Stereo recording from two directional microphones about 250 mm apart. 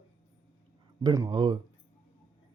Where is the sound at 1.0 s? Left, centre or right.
Centre.